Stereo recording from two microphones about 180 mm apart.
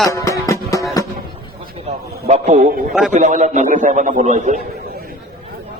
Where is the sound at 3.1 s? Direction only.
45° right (ahead or behind).